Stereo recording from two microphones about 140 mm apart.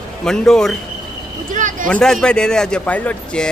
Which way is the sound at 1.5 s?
65° right (ahead or behind).